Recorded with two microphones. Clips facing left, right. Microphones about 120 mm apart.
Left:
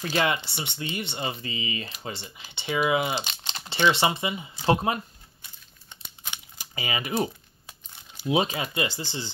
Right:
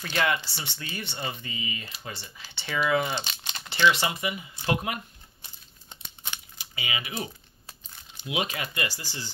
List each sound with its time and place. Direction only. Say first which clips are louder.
0.0 s speech: left 2 dB; 25° left (ahead or behind)
3.2 s speech: left 2 dB; 30° left (ahead or behind)
6.6 s speech: left 4 dB; 40° left (ahead or behind)
8.3 s speech: left 6 dB; 30° left (ahead or behind)